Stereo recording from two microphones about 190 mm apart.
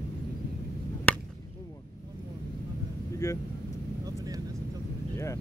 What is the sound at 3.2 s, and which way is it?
Vehicle, 20° left (ahead or behind).